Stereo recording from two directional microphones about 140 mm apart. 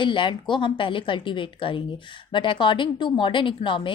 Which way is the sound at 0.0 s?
35° left (ahead or behind).